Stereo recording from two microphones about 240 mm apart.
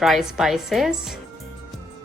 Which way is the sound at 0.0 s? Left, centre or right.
Centre.